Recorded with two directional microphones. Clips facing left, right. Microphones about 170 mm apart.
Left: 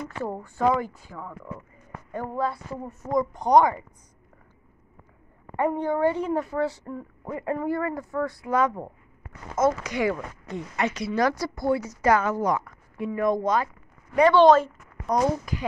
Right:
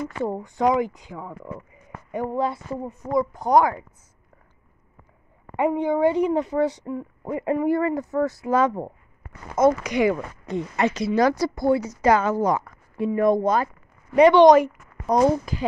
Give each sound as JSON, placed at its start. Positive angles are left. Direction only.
{"t": 0.1, "sound": "a woman's voice", "side_deg": -15}
{"t": 3.1, "sound": "speech", "side_deg": -5}
{"t": 5.6, "sound": "a woman's voice", "side_deg": -15}
{"t": 9.6, "sound": "a woman's voice", "side_deg": -15}
{"t": 14.1, "sound": "speech", "side_deg": -20}
{"t": 15.1, "sound": "a woman's voice", "side_deg": -30}